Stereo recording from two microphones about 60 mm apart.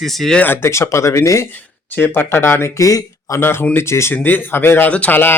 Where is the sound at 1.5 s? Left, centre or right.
Left.